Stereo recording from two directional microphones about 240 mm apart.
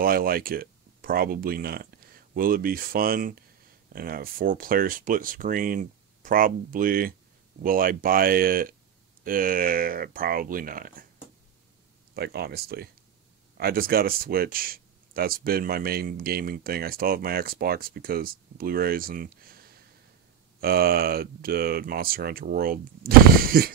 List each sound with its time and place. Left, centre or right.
0.0 s speech: right
12.1 s speech: right